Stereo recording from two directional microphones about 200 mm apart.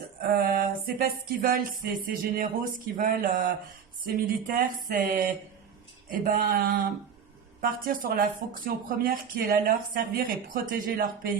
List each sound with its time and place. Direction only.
0.2 s speech: 50° right (ahead or behind)